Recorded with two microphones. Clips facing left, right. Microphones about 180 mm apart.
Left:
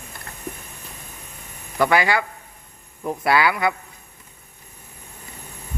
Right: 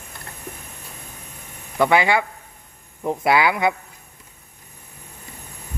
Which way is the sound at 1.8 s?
20° right (ahead or behind).